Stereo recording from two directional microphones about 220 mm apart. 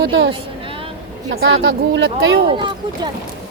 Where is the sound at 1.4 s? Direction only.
45° right (ahead or behind).